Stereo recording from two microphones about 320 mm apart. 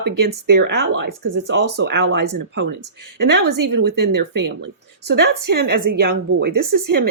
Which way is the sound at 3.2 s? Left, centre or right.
Right.